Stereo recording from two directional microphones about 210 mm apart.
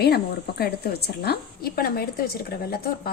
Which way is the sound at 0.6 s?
50° left (ahead or behind).